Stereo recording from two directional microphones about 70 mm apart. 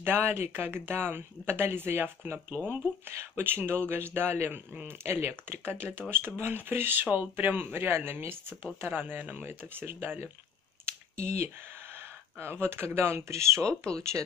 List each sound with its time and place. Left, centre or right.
0.0 s speech: right
10.9 s a sound: right
12.4 s speech: right
13.7 s speech: centre